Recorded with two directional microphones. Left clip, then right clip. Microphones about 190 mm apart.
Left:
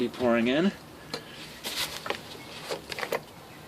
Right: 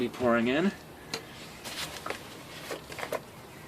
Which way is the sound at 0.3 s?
15° left (ahead or behind).